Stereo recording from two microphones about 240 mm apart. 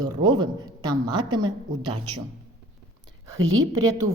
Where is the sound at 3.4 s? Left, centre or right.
Right.